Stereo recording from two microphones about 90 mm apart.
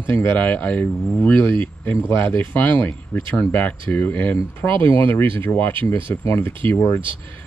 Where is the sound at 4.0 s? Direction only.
20° left (ahead or behind).